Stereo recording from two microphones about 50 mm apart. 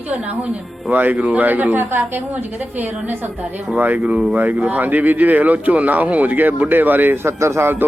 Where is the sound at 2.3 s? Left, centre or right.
Right.